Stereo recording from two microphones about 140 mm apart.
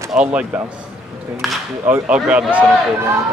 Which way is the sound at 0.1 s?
10° right (ahead or behind).